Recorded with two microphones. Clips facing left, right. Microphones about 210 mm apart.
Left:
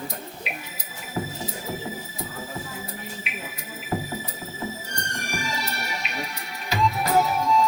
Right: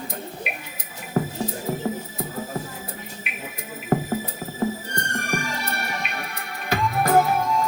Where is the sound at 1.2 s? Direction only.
55° right (ahead or behind).